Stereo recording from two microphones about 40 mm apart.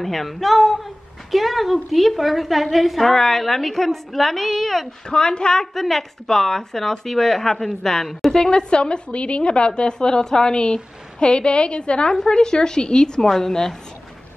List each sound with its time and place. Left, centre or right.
0.0 s a woman's voice: centre
5.1 s a woman's voice: left
5.8 s speech: centre
8.3 s a woman's voice: centre